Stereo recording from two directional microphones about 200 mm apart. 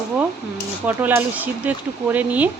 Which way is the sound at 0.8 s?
10° right (ahead or behind).